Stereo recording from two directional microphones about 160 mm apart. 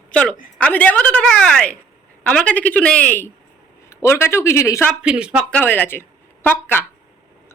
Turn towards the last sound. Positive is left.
turn(degrees=10)  # may be behind; listen again after turning